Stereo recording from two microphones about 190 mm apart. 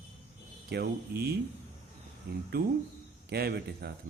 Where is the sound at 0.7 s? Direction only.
55° right (ahead or behind).